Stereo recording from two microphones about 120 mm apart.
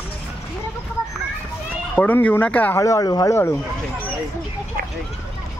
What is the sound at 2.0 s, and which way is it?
Speech, 15° left (ahead or behind).